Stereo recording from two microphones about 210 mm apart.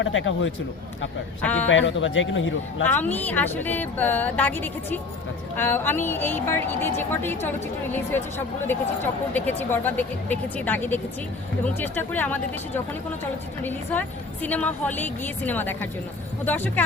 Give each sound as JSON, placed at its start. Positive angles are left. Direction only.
{"t": 0.0, "sound": "a man's voice", "side_deg": 65}
{"t": 1.4, "sound": "a woman's voice", "side_deg": 5}
{"t": 1.7, "sound": "a man's voice", "side_deg": 65}
{"t": 2.8, "sound": "a woman's voice", "side_deg": 10}
{"t": 9.3, "sound": "a woman's voice", "side_deg": 10}
{"t": 14.4, "sound": "a woman's voice", "side_deg": 5}